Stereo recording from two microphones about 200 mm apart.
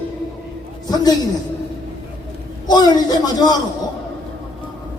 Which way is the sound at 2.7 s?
20° left (ahead or behind).